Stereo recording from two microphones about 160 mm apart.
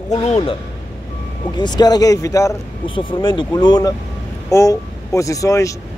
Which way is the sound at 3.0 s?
30° left (ahead or behind).